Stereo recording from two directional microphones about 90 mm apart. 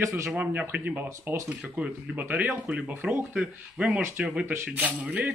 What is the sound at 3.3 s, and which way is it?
Speech, 10° right (ahead or behind).